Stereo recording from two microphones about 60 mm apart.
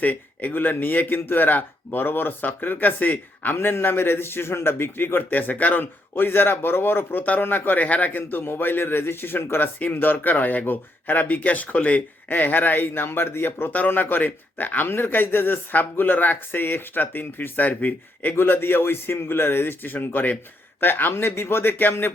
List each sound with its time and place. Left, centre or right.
0.0 s speech: left